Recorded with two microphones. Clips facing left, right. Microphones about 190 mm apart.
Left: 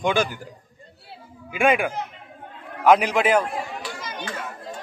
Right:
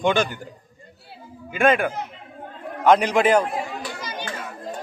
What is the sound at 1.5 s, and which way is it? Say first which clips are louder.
A man's voice: right 1 dB; 10° left (ahead or behind).